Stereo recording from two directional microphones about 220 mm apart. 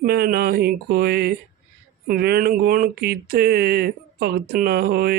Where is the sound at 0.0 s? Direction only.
45° right (ahead or behind).